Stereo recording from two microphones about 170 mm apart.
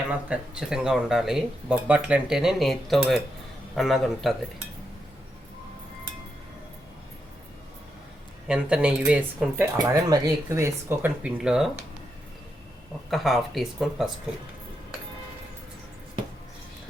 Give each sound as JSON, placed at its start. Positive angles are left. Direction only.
{"t": 0.3, "sound": "speech", "side_deg": -5}
{"t": 8.4, "sound": "speech", "side_deg": -5}
{"t": 9.7, "sound": "speech", "side_deg": -20}
{"t": 13.1, "sound": "speech", "side_deg": 0}